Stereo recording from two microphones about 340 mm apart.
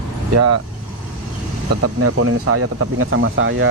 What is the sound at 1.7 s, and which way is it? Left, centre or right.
Speech, right.